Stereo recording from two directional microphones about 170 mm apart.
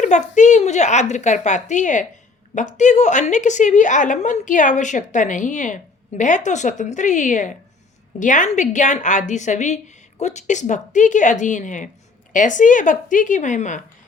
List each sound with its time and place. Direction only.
0.0 s a woman's voice: 45° left (ahead or behind)